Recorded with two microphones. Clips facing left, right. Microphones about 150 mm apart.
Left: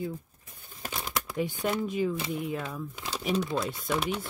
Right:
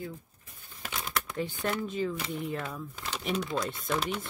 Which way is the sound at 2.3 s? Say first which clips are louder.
Left 2 dB; centre (ahead or behind).